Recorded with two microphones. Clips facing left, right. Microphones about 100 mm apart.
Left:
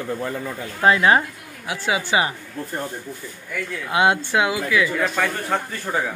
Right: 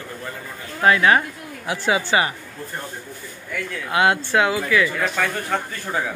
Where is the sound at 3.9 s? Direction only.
20° left (ahead or behind).